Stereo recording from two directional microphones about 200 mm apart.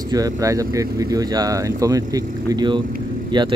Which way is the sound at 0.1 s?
15° right (ahead or behind).